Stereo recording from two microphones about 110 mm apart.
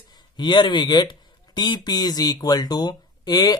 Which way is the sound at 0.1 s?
40° left (ahead or behind).